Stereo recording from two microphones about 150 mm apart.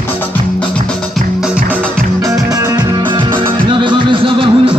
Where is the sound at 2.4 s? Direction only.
25° right (ahead or behind).